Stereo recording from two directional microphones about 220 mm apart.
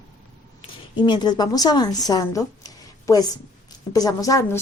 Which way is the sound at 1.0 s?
20° left (ahead or behind).